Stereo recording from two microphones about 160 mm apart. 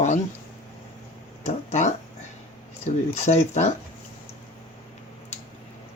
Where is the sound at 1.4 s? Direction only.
45° left (ahead or behind).